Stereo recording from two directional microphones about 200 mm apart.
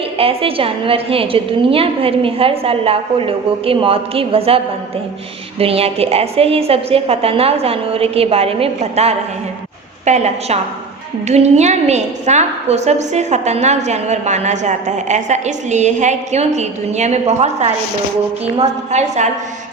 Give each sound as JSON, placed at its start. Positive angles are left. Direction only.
{"t": 0.2, "sound": "a woman's voice", "side_deg": -30}